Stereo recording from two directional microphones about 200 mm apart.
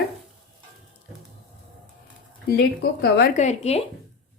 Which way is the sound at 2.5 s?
55° left (ahead or behind).